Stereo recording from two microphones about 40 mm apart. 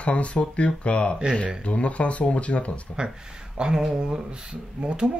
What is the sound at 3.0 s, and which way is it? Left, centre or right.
Speech, right.